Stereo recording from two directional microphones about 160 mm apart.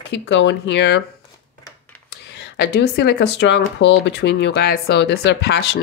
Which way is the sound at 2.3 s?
90° left.